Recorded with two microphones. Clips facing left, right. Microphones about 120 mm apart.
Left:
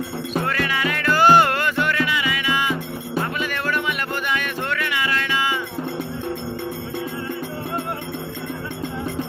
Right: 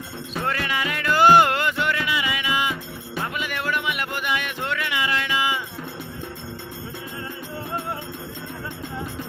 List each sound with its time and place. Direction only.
0.4 s music: 20° right (ahead or behind)